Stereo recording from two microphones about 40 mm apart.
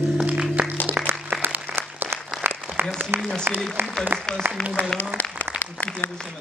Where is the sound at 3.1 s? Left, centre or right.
Right.